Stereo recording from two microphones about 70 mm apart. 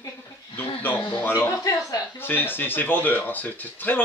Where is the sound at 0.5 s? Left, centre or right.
Left.